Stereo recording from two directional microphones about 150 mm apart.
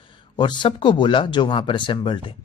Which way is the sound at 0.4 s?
30° left (ahead or behind).